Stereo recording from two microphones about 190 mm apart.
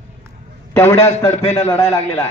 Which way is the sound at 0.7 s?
15° left (ahead or behind).